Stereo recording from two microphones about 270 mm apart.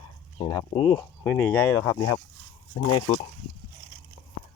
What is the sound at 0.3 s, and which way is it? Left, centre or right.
Speech, centre.